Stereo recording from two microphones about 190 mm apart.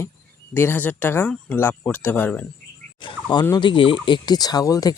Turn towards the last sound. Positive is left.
turn(degrees=20)  # may be behind; listen again after turning